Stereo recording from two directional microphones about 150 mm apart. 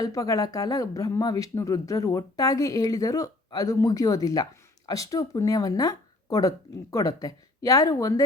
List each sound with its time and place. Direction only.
0.0 s speech: 25° left (ahead or behind)